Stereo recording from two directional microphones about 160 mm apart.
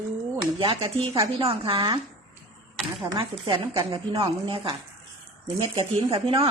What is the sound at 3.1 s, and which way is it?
A woman's voice, 30° right (ahead or behind).